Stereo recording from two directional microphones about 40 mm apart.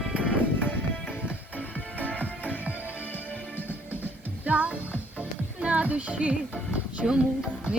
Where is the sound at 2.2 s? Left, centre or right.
Right.